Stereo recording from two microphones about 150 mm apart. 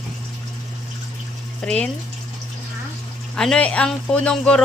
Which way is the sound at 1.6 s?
5° left (ahead or behind).